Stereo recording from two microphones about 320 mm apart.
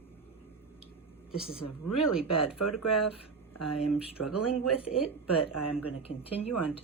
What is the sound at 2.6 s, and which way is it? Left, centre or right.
Speech, left.